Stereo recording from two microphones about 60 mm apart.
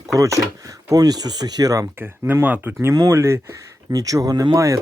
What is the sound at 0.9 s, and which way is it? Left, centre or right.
Speech, right.